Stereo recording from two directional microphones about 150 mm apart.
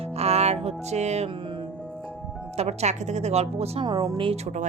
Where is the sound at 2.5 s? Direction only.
45° right (ahead or behind).